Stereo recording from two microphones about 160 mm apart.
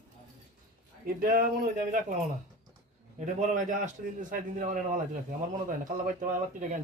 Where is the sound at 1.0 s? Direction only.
65° right (ahead or behind).